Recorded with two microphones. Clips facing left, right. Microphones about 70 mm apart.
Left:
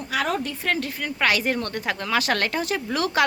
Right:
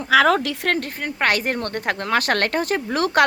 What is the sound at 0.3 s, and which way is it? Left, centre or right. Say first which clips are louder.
Speech: right 5 dB; right.